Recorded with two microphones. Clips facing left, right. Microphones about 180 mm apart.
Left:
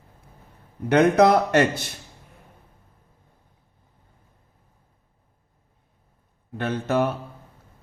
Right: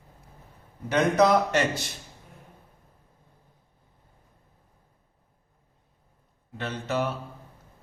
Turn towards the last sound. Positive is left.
turn(degrees=55)  # may be behind; listen again after turning